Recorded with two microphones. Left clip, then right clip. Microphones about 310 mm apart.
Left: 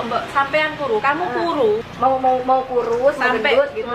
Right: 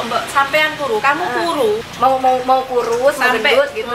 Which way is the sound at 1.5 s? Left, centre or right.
Left.